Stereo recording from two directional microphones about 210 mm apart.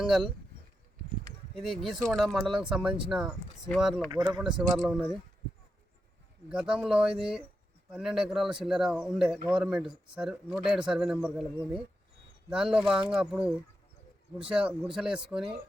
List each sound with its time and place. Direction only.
0.0 s speech: centre (ahead or behind)
1.5 s speech: centre (ahead or behind)
4.1 s speech: 20° right (ahead or behind)
4.4 s speech: 5° right (ahead or behind)
6.5 s speech: 5° right (ahead or behind)
14.8 s speech: 5° right (ahead or behind)